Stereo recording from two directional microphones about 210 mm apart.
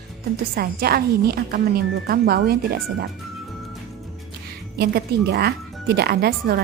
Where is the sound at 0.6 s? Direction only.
45° right (ahead or behind).